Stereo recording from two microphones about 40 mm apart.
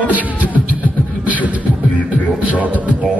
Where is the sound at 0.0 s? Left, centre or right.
Right.